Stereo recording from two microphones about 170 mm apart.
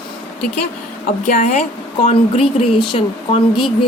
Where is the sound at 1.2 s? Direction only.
50° left (ahead or behind); by 3.7 s 30° left (ahead or behind).